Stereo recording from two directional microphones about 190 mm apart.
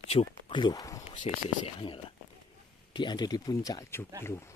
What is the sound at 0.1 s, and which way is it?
Speech, 30° left (ahead or behind).